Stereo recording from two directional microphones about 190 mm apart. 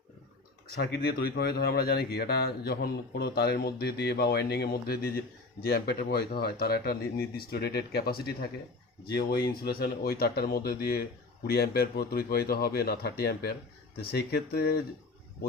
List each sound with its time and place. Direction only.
0.8 s speech: 60° left (ahead or behind)
9.6 s speech: 55° left (ahead or behind)